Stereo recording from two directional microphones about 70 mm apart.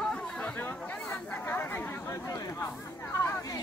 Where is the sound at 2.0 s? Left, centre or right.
Left.